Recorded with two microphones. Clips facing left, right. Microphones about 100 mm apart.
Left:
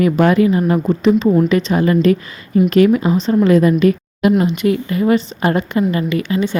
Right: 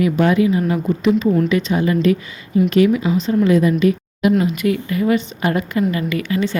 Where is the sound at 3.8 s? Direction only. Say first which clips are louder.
Left 2 dB; 45° left (ahead or behind).